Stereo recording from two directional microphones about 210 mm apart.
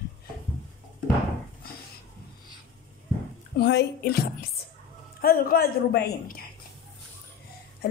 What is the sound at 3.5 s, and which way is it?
A woman's voice, 55° left (ahead or behind).